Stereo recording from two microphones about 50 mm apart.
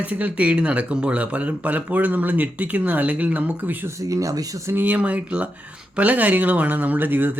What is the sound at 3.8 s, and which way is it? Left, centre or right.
Speech, right.